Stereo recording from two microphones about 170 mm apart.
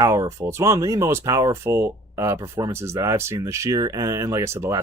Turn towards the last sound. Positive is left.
turn(degrees=-15)  # may be behind; listen again after turning